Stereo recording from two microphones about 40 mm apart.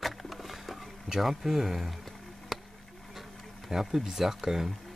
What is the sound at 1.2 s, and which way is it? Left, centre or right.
Speech, centre.